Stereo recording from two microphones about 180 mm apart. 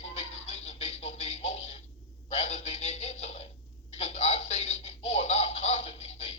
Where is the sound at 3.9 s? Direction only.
35° left (ahead or behind).